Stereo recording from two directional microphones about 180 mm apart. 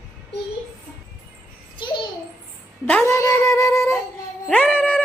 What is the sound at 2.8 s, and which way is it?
Cat, 10° left (ahead or behind).